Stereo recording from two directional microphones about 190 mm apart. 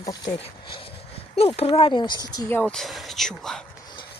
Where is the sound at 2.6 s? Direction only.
5° left (ahead or behind).